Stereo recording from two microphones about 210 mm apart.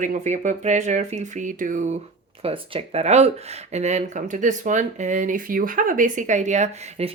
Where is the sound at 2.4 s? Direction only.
25° right (ahead or behind).